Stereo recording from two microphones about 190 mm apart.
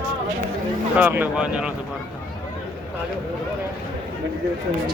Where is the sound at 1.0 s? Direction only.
10° right (ahead or behind).